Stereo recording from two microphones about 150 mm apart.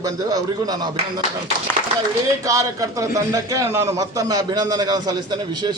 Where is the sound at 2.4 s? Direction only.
20° right (ahead or behind).